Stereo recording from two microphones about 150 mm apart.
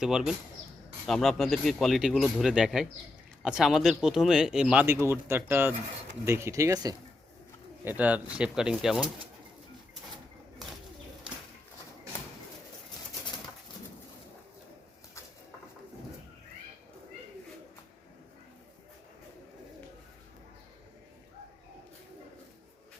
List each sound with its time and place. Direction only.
0.0 s speech: 5° right (ahead or behind); by 6.9 s 25° right (ahead or behind)
7.9 s speech: 10° right (ahead or behind)